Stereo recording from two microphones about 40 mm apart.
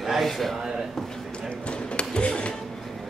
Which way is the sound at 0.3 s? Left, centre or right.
Centre.